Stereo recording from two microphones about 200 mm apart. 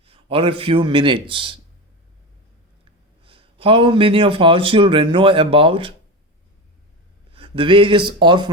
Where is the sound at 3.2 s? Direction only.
25° right (ahead or behind).